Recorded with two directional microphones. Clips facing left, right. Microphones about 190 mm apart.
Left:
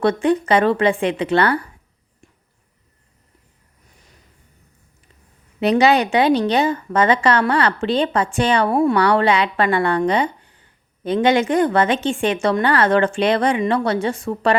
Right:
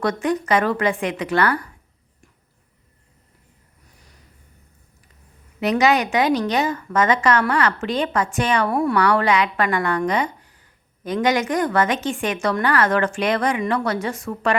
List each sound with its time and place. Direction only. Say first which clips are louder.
0.0 s a woman's voice: left 5 dB; 30° left (ahead or behind)
5.5 s a woman's voice: left 3 dB; 30° left (ahead or behind)